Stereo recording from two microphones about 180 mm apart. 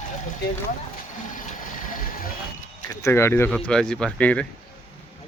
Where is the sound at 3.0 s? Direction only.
15° left (ahead or behind).